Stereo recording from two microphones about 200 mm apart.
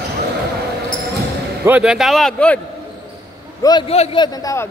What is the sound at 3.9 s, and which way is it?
Speech, 30° left (ahead or behind).